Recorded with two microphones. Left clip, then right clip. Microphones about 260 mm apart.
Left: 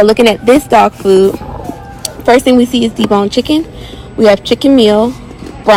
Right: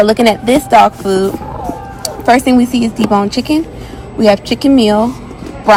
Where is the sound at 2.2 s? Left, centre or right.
Left.